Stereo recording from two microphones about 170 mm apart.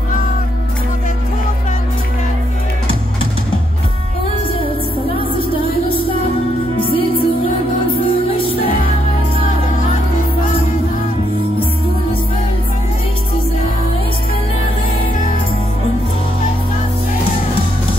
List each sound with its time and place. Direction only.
7.9 s music: 35° left (ahead or behind)